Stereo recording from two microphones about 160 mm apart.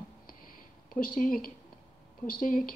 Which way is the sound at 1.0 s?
65° left (ahead or behind).